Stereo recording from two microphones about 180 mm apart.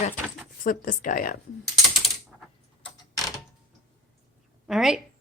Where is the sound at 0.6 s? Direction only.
50° left (ahead or behind).